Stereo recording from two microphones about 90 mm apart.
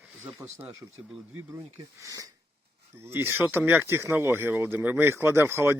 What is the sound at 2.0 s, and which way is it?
Speech, 40° right (ahead or behind).